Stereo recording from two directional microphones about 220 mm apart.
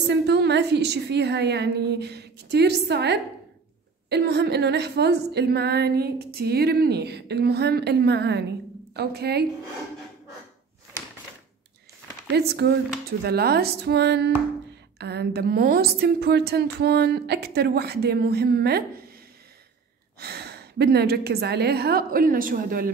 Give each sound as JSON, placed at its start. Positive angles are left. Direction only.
{"t": 0.1, "sound": "a woman's voice", "side_deg": -50}
{"t": 12.4, "sound": "a woman's voice", "side_deg": -50}
{"t": 20.2, "sound": "a woman's voice", "side_deg": -45}